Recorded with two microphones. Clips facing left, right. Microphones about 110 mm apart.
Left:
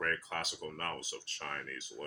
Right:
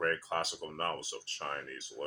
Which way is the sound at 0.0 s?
30° right (ahead or behind).